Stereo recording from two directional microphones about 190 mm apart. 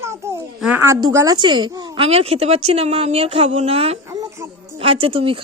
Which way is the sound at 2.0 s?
30° right (ahead or behind).